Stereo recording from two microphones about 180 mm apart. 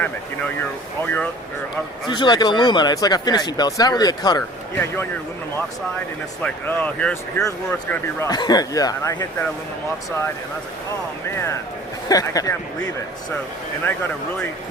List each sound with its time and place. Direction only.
1.0 s speech: 10° left (ahead or behind)
2.0 s speech: 25° left (ahead or behind)
6.4 s speech: 5° left (ahead or behind)
11.3 s speech: 15° left (ahead or behind)